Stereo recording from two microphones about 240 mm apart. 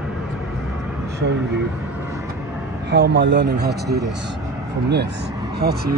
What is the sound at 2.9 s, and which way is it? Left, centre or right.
Speech, right.